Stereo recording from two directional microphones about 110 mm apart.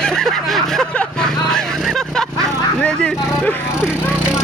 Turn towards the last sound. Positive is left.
turn(degrees=-10)  # may be behind; listen again after turning